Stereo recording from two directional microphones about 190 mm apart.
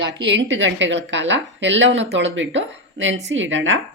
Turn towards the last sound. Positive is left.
turn(degrees=-80)